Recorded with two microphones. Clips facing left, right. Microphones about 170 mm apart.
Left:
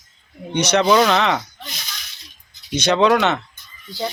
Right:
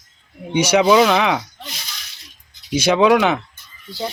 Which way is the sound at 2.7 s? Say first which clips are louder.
Right 2 dB; 10° right (ahead or behind).